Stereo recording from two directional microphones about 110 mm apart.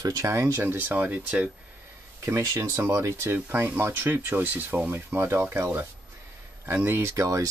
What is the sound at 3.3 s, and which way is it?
Speech, 15° right (ahead or behind).